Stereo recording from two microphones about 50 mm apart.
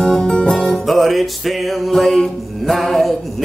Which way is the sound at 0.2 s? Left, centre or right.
Centre.